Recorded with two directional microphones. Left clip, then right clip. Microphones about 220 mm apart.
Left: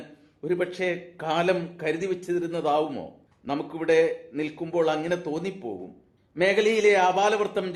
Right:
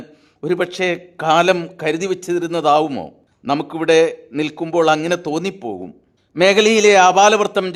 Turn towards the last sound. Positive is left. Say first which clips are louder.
# right 10 dB
turn(degrees=-50)  # may be behind; listen again after turning